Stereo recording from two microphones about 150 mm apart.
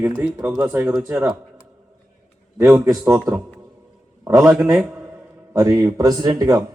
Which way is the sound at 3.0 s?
10° right (ahead or behind).